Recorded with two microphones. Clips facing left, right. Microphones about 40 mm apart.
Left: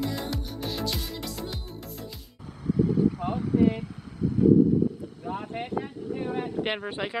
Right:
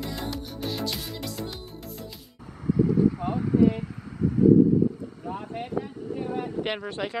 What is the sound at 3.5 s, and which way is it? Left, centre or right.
Vehicle, left.